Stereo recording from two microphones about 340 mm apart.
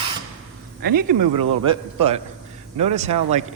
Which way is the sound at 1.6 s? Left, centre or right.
Centre.